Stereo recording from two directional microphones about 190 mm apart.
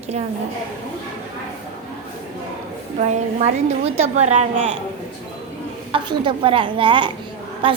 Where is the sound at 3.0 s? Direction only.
35° right (ahead or behind).